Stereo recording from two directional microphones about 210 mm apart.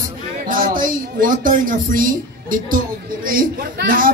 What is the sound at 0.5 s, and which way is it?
Speech, 40° right (ahead or behind).